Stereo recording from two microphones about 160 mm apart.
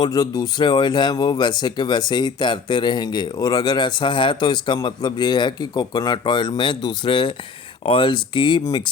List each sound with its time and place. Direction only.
0.0 s speech: 25° left (ahead or behind)